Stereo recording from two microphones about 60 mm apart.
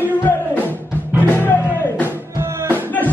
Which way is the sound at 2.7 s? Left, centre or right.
Left.